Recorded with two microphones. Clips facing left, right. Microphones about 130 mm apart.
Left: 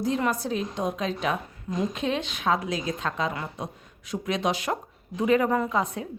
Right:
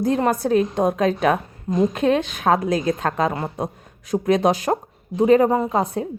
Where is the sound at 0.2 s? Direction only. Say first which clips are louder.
Right 8 dB; 50° right (ahead or behind).